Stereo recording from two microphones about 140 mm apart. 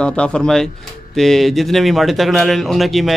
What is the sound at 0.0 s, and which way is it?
A man's voice, 5° left (ahead or behind).